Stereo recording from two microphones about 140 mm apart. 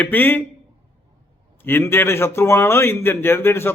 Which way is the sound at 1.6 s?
15° left (ahead or behind).